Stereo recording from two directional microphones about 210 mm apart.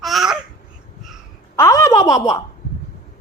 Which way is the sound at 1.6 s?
15° left (ahead or behind).